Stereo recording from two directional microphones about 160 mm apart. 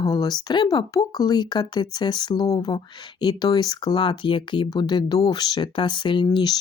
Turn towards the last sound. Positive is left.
turn(degrees=25)  # may be behind; listen again after turning